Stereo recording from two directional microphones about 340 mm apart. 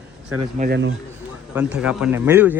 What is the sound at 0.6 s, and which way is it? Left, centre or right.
Speech, right.